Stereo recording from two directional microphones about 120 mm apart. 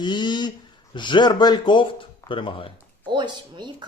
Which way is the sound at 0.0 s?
40° left (ahead or behind).